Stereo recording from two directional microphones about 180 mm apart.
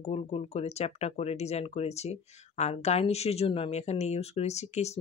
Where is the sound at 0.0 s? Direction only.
35° left (ahead or behind).